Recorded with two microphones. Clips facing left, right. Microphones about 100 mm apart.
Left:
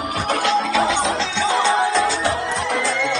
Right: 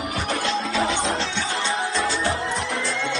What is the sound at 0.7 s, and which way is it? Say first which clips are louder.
Music: left 4 dB; 90° left.